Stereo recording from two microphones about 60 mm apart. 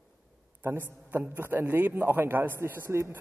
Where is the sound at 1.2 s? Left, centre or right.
Right.